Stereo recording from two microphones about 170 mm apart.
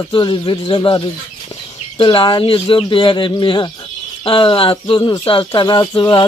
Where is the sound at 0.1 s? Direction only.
30° left (ahead or behind).